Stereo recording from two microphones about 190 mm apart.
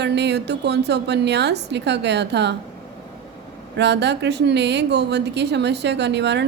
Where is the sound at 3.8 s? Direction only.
65° right (ahead or behind).